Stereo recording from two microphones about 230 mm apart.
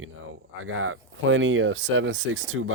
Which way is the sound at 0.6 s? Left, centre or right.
Right.